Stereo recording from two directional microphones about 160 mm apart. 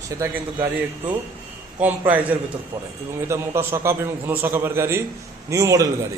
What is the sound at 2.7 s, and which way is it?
A man's voice, 20° right (ahead or behind).